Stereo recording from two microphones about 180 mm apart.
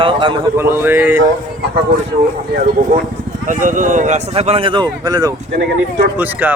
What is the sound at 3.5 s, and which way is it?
Speech, 45° right (ahead or behind).